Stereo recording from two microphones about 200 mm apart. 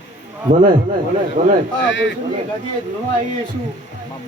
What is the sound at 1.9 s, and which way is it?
Speech, 65° left (ahead or behind).